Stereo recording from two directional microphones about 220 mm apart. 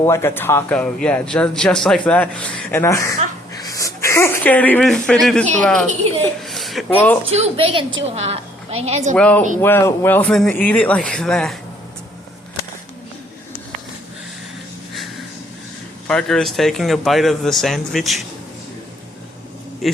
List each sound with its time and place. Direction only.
0.0 s a man's voice: 15° left (ahead or behind)
3.6 s a sound: 15° left (ahead or behind)
5.2 s a man's voice: 5° left (ahead or behind)
6.4 s a sound: centre (ahead or behind)
7.3 s a woman's voice: 30° right (ahead or behind)
9.1 s a man's voice: 5° left (ahead or behind)
16.0 s a man's voice: centre (ahead or behind)
19.8 s speech: centre (ahead or behind)